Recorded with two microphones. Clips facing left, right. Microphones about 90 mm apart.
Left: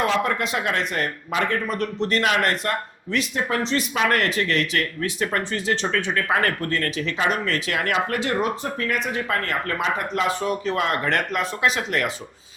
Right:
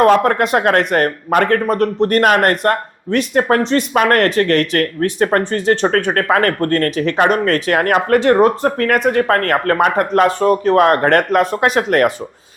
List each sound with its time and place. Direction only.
0.0 s speech: 50° right (ahead or behind)